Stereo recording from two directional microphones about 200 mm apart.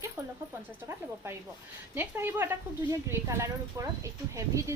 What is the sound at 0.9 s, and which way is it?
Speech, 10° right (ahead or behind).